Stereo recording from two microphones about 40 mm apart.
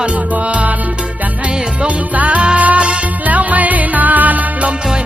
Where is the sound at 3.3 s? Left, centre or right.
Right.